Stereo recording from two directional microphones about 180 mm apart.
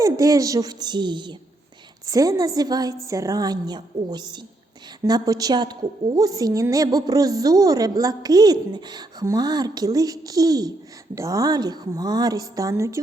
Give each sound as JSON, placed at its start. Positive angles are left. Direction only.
{"t": 0.0, "sound": "a woman's voice", "side_deg": -20}